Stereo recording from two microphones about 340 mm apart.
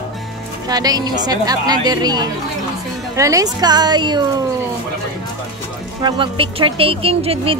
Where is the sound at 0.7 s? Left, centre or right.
Centre.